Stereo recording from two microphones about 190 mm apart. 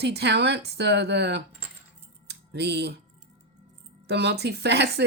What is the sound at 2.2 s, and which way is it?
Music, 60° right (ahead or behind).